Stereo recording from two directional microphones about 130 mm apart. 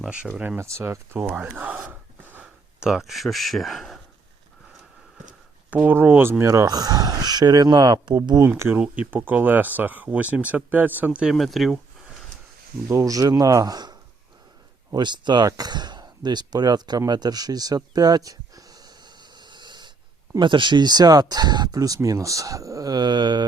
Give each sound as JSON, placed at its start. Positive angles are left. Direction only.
{"t": 0.0, "sound": "speech", "side_deg": -10}
{"t": 1.3, "sound": "gasp", "side_deg": -10}
{"t": 5.7, "sound": "speech", "side_deg": -15}
{"t": 8.4, "sound": "speech", "side_deg": -20}
{"t": 12.9, "sound": "speech", "side_deg": -25}
{"t": 17.1, "sound": "a sound", "side_deg": -30}
{"t": 20.3, "sound": "speech", "side_deg": -35}